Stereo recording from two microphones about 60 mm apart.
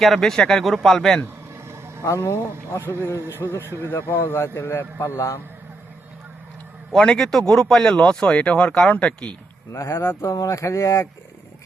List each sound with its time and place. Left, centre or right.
0.0 s speech: centre
1.5 s vehicle: right
2.0 s speech: left
6.9 s speech: centre
9.7 s speech: left
10.5 s speech: left